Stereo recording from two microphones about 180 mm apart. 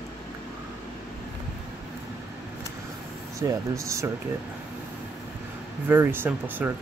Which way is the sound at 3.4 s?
15° right (ahead or behind).